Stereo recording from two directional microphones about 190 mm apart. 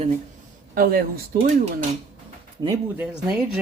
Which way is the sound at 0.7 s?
50° right (ahead or behind).